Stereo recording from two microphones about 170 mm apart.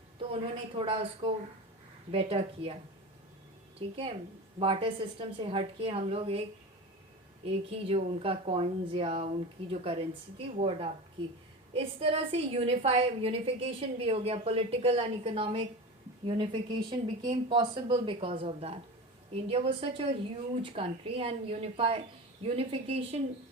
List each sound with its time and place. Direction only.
0.2 s a woman's voice: 35° right (ahead or behind)
4.6 s a woman's voice: 30° right (ahead or behind)
7.4 s a woman's voice: 35° right (ahead or behind)